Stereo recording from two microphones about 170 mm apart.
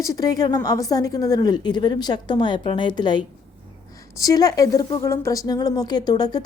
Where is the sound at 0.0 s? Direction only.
20° left (ahead or behind).